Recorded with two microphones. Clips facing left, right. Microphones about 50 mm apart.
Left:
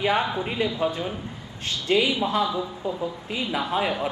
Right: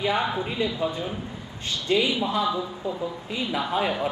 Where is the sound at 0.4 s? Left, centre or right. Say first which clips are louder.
Left 1 dB; centre.